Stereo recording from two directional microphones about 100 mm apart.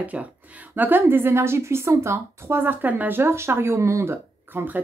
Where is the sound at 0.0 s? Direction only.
15° right (ahead or behind).